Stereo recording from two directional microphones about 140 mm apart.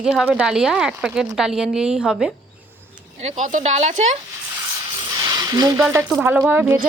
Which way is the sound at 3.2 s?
65° right (ahead or behind).